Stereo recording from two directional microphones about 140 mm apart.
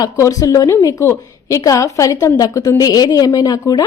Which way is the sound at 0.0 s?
25° left (ahead or behind).